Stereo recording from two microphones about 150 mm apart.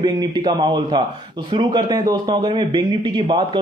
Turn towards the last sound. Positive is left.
turn(degrees=-30)  # may be behind; listen again after turning